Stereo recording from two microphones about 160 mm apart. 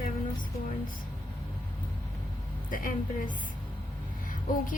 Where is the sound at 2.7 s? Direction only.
60° left (ahead or behind).